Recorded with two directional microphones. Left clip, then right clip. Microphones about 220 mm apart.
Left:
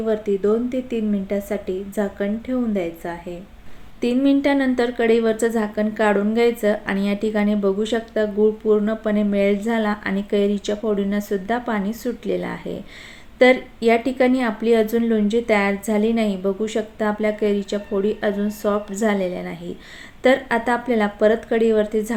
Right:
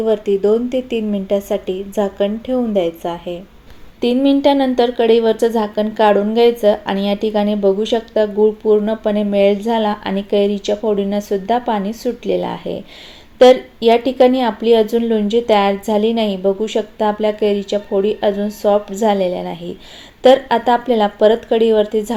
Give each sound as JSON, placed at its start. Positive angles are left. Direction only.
{"t": 0.0, "sound": "speech", "side_deg": -5}